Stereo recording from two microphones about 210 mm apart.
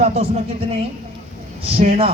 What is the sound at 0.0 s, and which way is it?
Speech, 30° right (ahead or behind).